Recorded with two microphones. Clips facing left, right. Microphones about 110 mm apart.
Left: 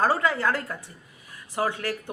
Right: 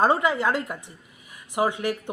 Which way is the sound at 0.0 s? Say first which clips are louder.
Right 2 dB; 20° right (ahead or behind).